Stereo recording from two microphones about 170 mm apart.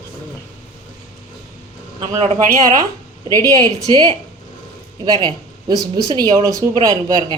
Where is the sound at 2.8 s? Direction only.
20° right (ahead or behind).